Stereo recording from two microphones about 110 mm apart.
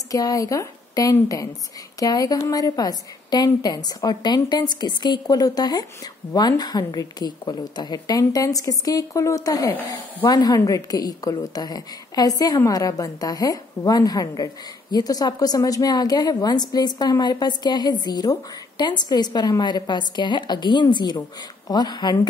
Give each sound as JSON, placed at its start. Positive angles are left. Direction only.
{"t": 0.1, "sound": "a woman's voice", "side_deg": 30}